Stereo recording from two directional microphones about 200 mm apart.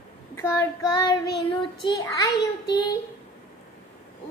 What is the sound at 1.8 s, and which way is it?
Child singing, 20° left (ahead or behind).